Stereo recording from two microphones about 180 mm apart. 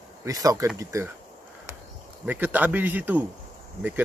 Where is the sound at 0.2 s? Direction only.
20° right (ahead or behind).